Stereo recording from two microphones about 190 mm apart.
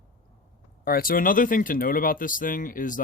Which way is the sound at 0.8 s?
50° left (ahead or behind).